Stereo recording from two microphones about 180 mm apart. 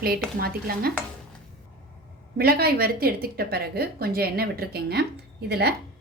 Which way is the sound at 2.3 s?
55° right (ahead or behind).